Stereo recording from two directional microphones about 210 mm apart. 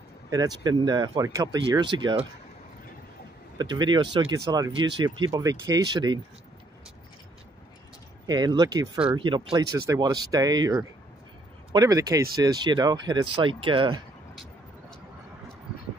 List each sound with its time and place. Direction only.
0.3 s speech: 20° right (ahead or behind)
3.5 s speech: 20° right (ahead or behind)
8.3 s speech: 20° right (ahead or behind)
14.3 s vehicle: centre (ahead or behind)